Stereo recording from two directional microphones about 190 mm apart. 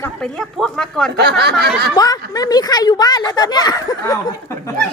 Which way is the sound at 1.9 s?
20° left (ahead or behind).